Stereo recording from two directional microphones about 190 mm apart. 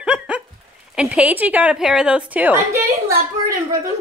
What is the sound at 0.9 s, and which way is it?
A woman's voice, 5° right (ahead or behind).